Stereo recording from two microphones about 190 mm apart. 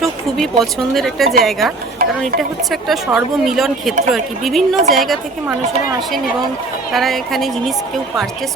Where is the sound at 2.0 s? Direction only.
50° right (ahead or behind).